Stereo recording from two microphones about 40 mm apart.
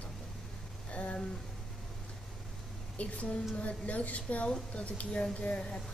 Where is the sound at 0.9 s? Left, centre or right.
Left.